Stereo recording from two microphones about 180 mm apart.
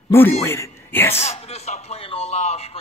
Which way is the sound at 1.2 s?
35° left (ahead or behind).